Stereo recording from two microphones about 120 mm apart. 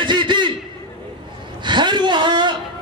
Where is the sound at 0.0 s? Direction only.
40° right (ahead or behind).